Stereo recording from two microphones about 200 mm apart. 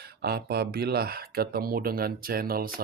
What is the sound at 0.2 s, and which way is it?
Speech, 50° right (ahead or behind).